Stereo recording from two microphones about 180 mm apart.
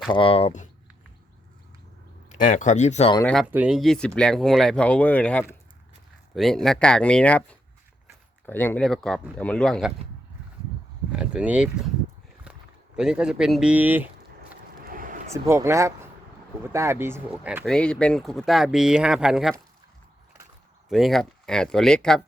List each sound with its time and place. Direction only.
0.1 s speech: 30° left (ahead or behind)
2.4 s speech: 45° left (ahead or behind)
3.5 s speech: 5° right (ahead or behind)
8.4 s speech: 10° left (ahead or behind)
11.2 s speech: 5° right (ahead or behind)
13.0 s speech: 5° right (ahead or behind)
14.8 s a sound: 50° right (ahead or behind)
15.3 s speech: 15° right (ahead or behind)
17.7 s speech: 5° left (ahead or behind)
20.9 s speech: centre (ahead or behind)